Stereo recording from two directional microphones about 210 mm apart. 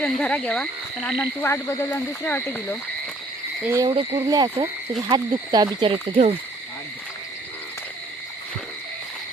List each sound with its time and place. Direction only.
0.0 s speech: 5° left (ahead or behind)
3.8 s frog: 25° right (ahead or behind)